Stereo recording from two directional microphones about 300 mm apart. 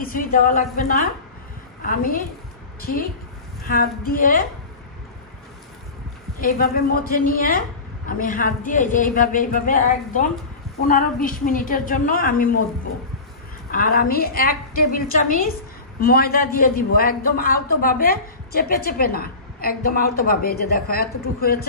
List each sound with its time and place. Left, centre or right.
0.0 s a man's voice: left
6.7 s a man's voice: left
13.7 s a man's voice: left